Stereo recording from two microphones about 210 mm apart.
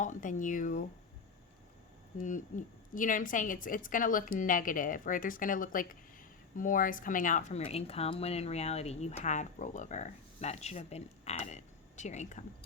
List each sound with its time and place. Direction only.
0.0 s speech: 35° left (ahead or behind)
2.2 s speech: 35° left (ahead or behind)